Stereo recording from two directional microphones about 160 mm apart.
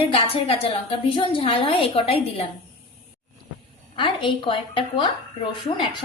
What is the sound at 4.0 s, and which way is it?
A woman's voice, 30° left (ahead or behind).